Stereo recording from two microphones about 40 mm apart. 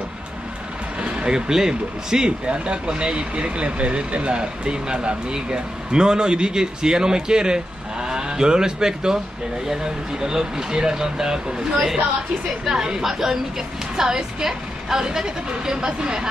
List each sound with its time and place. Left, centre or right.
1.0 s speech: right
10.2 s a woman's voice: centre